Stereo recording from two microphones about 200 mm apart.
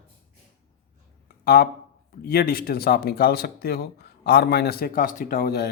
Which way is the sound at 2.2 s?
50° left (ahead or behind).